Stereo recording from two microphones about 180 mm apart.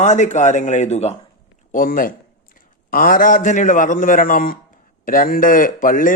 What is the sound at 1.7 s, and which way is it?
Speech, 50° left (ahead or behind).